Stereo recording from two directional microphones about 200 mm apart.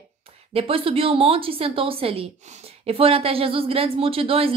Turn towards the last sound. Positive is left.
turn(degrees=-30)  # may be behind; listen again after turning